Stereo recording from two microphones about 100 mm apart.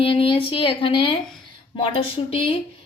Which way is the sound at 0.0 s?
65° left (ahead or behind).